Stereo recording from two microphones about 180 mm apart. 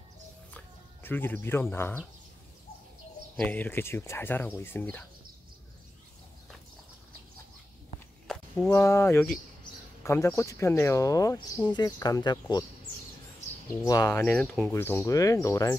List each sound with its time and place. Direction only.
1.0 s speech: 10° left (ahead or behind)
3.3 s speech: 10° left (ahead or behind)
8.3 s a sound: 5° left (ahead or behind)
8.7 s speech: 15° left (ahead or behind)
13.7 s speech: 20° left (ahead or behind)